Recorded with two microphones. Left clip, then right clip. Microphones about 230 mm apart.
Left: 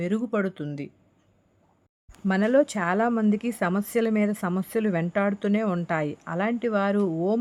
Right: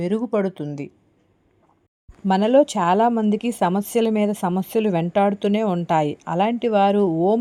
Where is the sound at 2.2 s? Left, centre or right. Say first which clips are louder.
Right 6 dB; centre.